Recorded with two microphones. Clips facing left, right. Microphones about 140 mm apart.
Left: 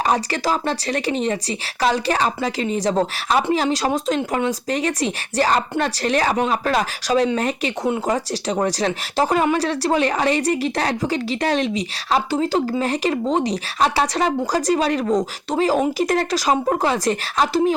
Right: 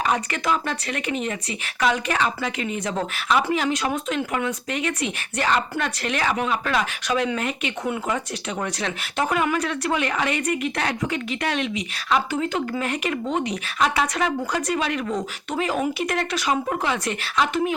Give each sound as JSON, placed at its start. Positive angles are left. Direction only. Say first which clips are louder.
{"t": 0.0, "sound": "speech", "louder": "left 4 dB", "side_deg": 35}